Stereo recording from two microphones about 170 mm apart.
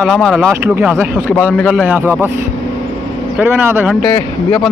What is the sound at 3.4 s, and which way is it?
Speech, 10° right (ahead or behind).